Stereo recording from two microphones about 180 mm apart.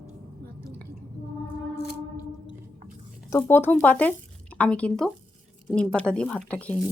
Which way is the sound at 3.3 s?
10° left (ahead or behind).